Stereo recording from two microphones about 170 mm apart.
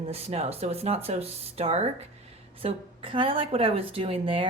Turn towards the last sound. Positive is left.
turn(degrees=-35)  # may be behind; listen again after turning